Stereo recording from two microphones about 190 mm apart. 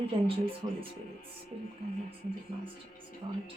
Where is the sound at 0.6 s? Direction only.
25° right (ahead or behind).